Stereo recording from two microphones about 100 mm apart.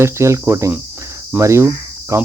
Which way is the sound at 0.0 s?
25° right (ahead or behind).